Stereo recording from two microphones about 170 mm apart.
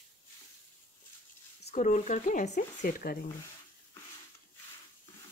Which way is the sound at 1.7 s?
45° left (ahead or behind).